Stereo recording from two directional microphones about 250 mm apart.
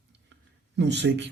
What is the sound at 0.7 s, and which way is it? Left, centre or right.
Speech, right.